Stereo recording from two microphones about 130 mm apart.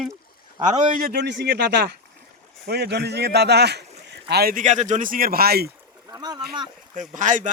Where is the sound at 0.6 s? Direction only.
80° right.